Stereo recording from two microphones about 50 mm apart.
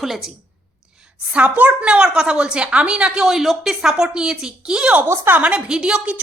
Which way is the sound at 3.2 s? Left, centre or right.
Centre.